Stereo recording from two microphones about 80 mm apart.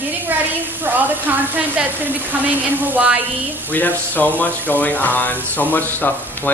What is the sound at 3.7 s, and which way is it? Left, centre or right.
Speech, left.